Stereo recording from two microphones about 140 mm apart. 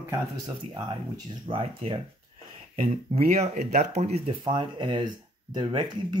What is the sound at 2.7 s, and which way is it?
Speech, 55° right (ahead or behind).